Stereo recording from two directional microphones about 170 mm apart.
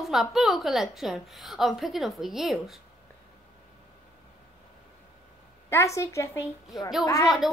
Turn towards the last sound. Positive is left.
turn(degrees=0)  # may be behind; listen again after turning